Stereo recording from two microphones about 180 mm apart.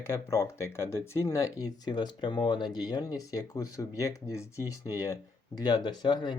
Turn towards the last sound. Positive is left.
turn(degrees=25)  # may be behind; listen again after turning